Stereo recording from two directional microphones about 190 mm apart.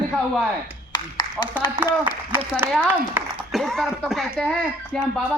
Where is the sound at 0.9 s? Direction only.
25° left (ahead or behind).